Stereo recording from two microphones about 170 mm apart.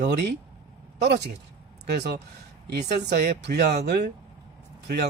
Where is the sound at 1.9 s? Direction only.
75° right (ahead or behind).